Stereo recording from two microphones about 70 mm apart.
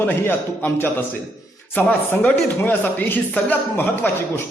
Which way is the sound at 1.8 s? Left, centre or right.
Centre.